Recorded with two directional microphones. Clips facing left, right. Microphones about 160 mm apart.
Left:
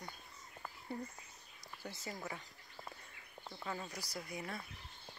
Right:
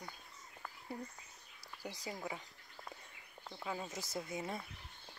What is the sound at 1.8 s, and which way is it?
Speech, 15° right (ahead or behind).